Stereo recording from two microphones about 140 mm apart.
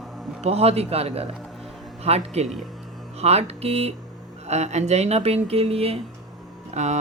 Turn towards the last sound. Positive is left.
turn(degrees=-55)  # may be behind; listen again after turning